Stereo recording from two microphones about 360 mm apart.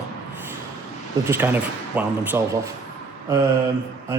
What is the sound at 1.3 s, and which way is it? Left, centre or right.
Speech, centre.